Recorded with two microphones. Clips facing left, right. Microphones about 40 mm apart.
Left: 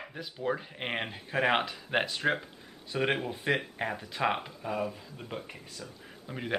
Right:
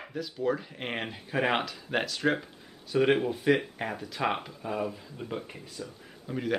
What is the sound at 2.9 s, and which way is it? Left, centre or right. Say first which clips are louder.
Speech: right 5 dB; centre.